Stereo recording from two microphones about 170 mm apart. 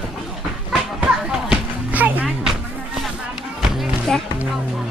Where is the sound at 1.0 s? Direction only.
5° right (ahead or behind).